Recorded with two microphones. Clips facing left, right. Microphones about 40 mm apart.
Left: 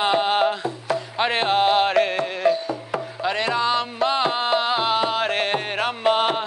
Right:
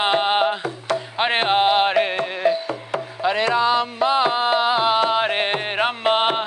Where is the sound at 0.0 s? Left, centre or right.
Right.